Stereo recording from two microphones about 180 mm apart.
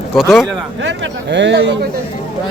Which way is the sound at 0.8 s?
85° right.